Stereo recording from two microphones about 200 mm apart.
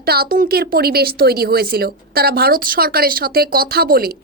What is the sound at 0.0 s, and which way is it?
Speech, 50° right (ahead or behind).